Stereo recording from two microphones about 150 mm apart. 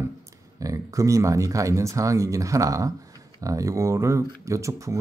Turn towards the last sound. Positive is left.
turn(degrees=-20)  # may be behind; listen again after turning